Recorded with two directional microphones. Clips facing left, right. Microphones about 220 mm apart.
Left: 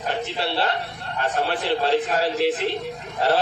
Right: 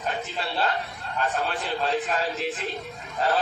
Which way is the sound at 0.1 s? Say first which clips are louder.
Left 5 dB; 75° left (ahead or behind).